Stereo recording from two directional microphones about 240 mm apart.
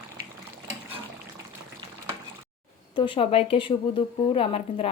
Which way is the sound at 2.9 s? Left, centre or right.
Left.